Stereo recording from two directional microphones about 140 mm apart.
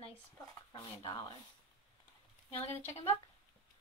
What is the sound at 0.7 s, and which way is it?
Speech, 35° left (ahead or behind).